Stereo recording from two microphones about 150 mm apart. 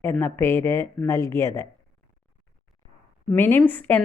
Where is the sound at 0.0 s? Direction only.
15° left (ahead or behind).